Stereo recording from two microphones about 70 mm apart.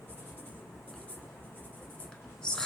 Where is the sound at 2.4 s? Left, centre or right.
Centre.